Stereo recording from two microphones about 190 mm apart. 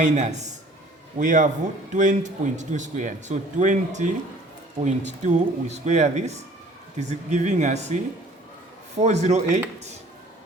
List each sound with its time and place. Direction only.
0.0 s speech: 40° right (ahead or behind)
9.0 s speech: 35° right (ahead or behind)